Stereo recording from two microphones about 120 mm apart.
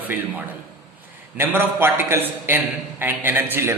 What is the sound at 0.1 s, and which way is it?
A man's voice, 15° right (ahead or behind).